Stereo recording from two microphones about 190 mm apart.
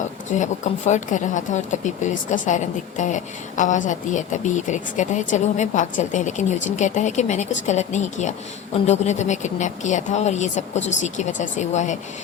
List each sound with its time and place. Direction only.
0.3 s a woman's voice: 40° left (ahead or behind)